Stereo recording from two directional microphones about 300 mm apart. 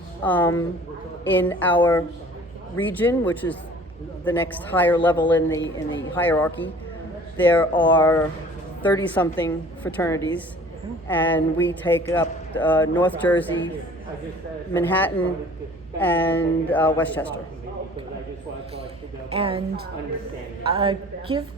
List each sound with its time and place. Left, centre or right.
0.2 s speech: centre
14.7 s speech: centre
19.3 s a woman's voice: centre
20.7 s a woman's voice: centre